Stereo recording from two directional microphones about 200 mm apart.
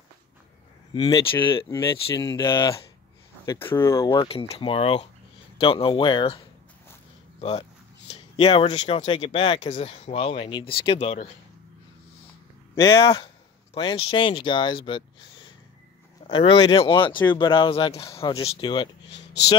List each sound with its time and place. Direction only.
0.9 s speech: 20° left (ahead or behind)
12.7 s speech: 25° left (ahead or behind)
18.1 s speech: 15° left (ahead or behind)
19.0 s a sound: 60° left (ahead or behind)